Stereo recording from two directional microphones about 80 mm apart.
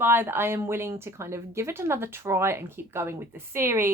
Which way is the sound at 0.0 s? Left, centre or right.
Right.